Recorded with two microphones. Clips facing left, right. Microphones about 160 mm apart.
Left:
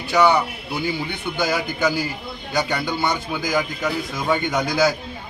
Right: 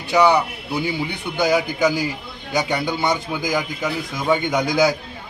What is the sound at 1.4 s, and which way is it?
A man's voice, 15° right (ahead or behind).